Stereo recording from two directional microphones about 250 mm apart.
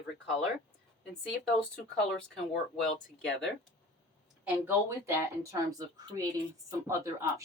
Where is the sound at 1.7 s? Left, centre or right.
Centre.